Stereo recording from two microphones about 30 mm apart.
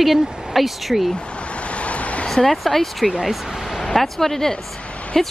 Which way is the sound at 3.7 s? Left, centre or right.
Centre.